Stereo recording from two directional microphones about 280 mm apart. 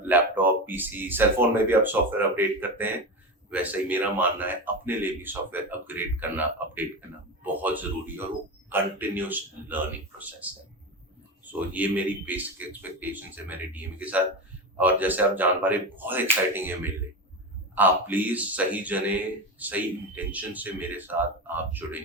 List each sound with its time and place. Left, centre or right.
0.0 s a man's voice: centre
11.7 s a man's voice: centre